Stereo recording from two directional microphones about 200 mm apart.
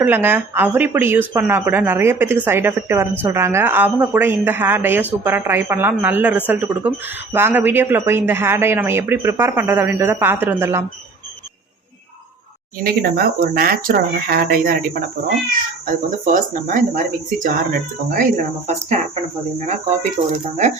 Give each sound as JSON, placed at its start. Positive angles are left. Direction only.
{"t": 0.0, "sound": "a woman's voice", "side_deg": -10}
{"t": 12.8, "sound": "speech", "side_deg": -50}
{"t": 20.3, "sound": "speech", "side_deg": -35}